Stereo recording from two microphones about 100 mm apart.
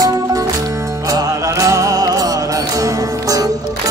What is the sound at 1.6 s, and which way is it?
Music, 35° right (ahead or behind).